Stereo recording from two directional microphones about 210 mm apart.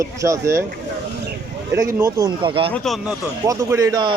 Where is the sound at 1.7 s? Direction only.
15° right (ahead or behind).